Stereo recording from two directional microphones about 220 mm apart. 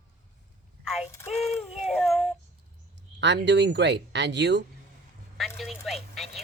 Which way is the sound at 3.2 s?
50° right (ahead or behind).